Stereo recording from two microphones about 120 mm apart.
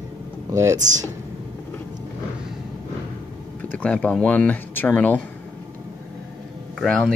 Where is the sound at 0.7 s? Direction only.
90° right.